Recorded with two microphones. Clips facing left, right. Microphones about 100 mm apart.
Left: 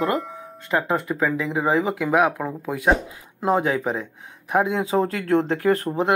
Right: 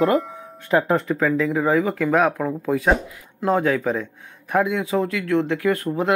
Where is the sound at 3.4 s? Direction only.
20° left (ahead or behind).